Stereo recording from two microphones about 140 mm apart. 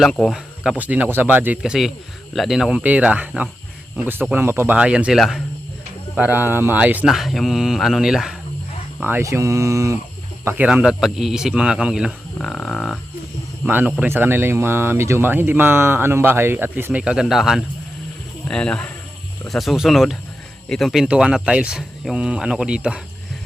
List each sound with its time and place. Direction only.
0.0 s speech: centre (ahead or behind)
6.1 s speech: 10° right (ahead or behind)
9.0 s speech: 15° right (ahead or behind)
10.4 s speech: 10° right (ahead or behind)
13.7 s speech: 15° right (ahead or behind)